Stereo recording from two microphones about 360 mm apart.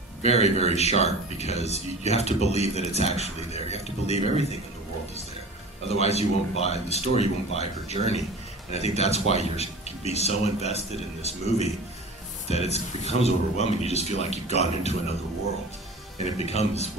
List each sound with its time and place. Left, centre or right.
0.2 s speech: centre
5.9 s speech: centre
16.3 s speech: centre